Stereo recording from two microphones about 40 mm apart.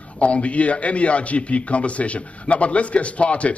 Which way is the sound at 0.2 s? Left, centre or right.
Left.